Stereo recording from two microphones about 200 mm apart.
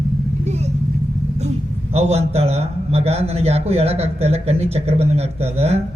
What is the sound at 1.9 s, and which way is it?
A man's voice, 30° right (ahead or behind).